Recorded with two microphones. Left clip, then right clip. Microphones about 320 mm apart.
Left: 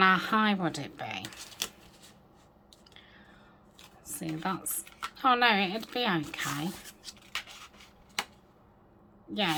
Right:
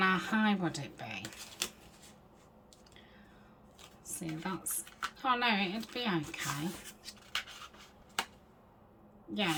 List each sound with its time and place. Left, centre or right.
0.0 s speech: centre
3.8 s speech: centre
9.3 s a woman's voice: centre